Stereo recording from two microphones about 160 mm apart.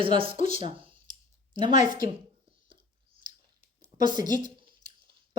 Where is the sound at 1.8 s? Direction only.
25° right (ahead or behind).